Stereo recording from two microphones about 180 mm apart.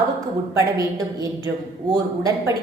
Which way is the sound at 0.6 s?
20° right (ahead or behind).